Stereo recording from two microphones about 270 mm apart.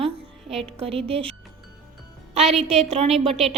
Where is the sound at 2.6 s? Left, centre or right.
Right.